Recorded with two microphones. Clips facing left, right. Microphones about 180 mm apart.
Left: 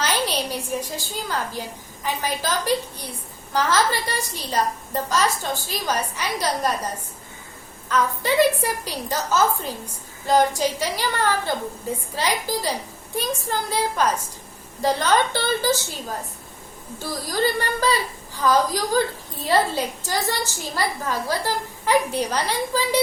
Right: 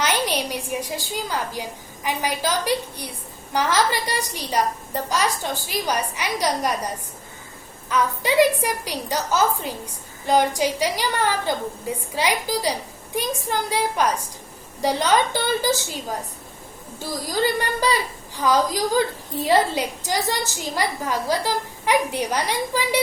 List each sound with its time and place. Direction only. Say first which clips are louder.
0.5 s a woman's voice: even; 15° right (ahead or behind)
7.9 s a woman's voice: even; 15° right (ahead or behind)
17.1 s a woman's voice: even; 15° right (ahead or behind)